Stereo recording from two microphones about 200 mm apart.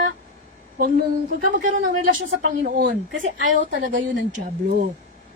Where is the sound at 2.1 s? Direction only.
45° right (ahead or behind).